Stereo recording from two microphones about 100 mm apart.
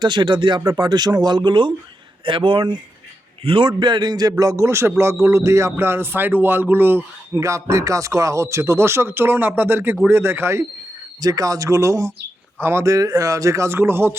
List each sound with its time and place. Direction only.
0.0 s a man's voice: 50° right (ahead or behind); by 10.7 s 25° right (ahead or behind)
11.2 s a man's voice: 40° right (ahead or behind)